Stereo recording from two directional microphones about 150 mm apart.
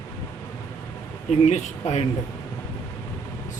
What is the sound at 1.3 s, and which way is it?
Speech, 50° left (ahead or behind).